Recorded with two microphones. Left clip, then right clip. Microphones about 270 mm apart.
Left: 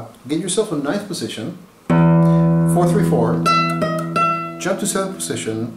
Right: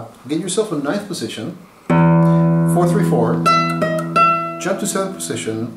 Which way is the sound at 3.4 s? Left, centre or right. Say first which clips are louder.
Right 1 dB; centre.